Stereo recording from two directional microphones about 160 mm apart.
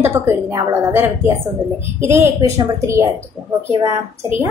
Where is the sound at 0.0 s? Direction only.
15° right (ahead or behind).